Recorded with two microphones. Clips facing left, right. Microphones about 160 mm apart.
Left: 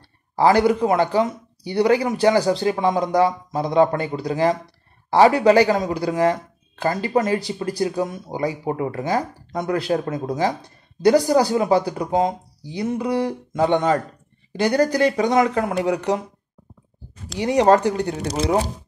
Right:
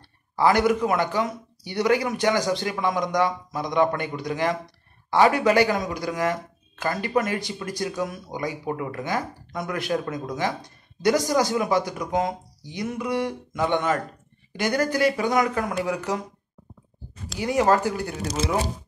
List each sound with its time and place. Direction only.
0.4 s speech: 30° left (ahead or behind)
15.3 s speech: 25° left (ahead or behind)
17.4 s speech: 35° left (ahead or behind)